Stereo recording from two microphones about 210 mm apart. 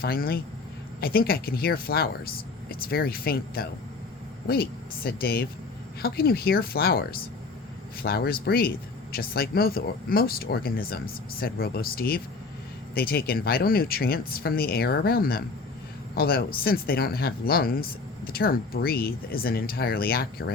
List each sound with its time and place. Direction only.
0.0 s speech: 45° left (ahead or behind)